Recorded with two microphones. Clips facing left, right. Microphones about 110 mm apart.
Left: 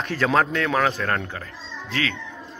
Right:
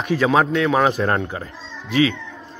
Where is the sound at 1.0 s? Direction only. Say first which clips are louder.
Right 5 dB; 25° right (ahead or behind).